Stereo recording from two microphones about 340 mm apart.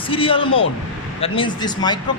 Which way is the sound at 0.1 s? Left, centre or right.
Centre.